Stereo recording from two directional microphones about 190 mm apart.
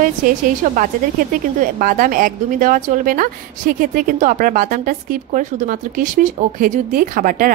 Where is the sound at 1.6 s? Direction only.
45° right (ahead or behind).